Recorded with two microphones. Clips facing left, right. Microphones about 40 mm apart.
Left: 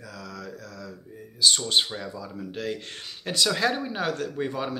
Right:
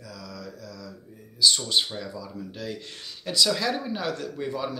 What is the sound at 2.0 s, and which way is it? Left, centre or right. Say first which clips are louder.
Speech: even; left.